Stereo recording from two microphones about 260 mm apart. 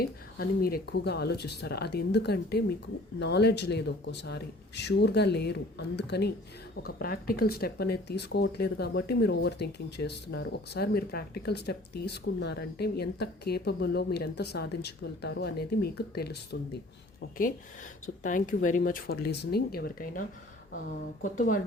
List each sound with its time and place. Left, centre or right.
0.0 s speech: left
18.2 s speech: left
21.3 s speech: left